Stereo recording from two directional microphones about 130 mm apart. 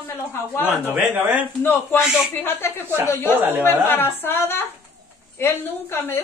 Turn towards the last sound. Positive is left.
turn(degrees=15)  # may be behind; listen again after turning